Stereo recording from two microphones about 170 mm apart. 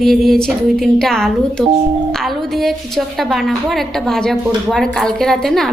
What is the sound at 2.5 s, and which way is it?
A woman's voice, centre (ahead or behind).